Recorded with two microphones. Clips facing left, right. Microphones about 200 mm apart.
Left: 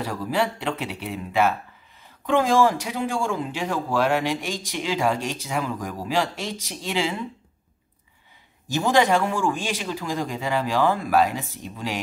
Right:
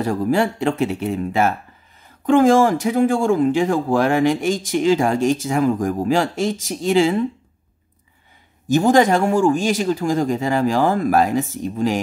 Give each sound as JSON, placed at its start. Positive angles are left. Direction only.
{"t": 0.0, "sound": "speech", "side_deg": -45}
{"t": 8.6, "sound": "speech", "side_deg": -45}